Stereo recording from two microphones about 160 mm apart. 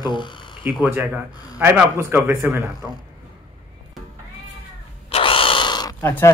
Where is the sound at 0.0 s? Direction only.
30° left (ahead or behind).